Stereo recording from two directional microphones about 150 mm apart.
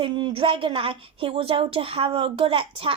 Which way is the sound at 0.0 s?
35° right (ahead or behind).